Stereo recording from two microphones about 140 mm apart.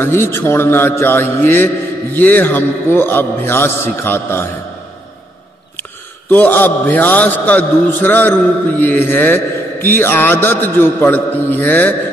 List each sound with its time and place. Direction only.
0.0 s a man's voice: 15° left (ahead or behind)
6.3 s a man's voice: 10° left (ahead or behind)